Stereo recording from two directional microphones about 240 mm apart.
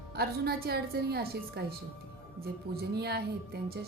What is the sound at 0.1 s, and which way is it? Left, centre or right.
A woman's voice, right.